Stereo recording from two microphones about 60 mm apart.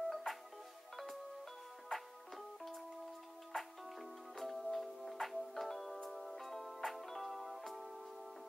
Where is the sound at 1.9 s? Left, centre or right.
Centre.